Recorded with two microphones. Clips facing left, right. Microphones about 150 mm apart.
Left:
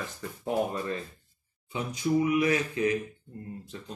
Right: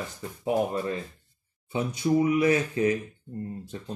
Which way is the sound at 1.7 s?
35° right (ahead or behind).